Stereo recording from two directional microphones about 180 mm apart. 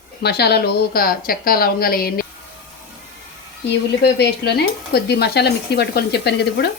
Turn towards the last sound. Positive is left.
turn(degrees=70)  # may be behind; listen again after turning